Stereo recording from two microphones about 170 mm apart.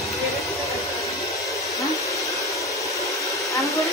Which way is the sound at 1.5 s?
20° left (ahead or behind).